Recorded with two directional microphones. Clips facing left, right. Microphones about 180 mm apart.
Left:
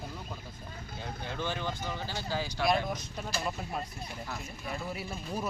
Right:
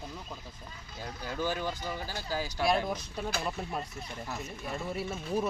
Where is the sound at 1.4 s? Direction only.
10° right (ahead or behind).